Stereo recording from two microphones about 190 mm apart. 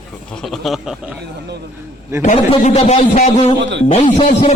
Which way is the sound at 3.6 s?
70° right (ahead or behind).